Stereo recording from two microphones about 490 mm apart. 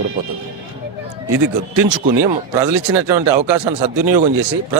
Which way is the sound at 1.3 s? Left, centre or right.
Right.